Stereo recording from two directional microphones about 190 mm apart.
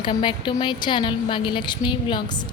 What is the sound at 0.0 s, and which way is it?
A woman's voice, 25° left (ahead or behind).